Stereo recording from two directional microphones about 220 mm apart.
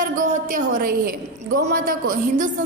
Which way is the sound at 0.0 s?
35° right (ahead or behind).